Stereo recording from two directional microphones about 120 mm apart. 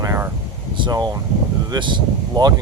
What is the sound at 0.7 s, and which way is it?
Speech, 40° right (ahead or behind).